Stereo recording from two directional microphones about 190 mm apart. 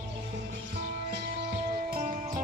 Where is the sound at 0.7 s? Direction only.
55° right (ahead or behind).